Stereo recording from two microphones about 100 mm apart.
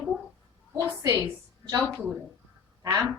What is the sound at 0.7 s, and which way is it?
Speech, 30° right (ahead or behind).